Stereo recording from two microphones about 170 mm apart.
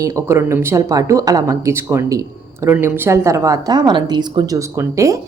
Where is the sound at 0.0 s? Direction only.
20° right (ahead or behind).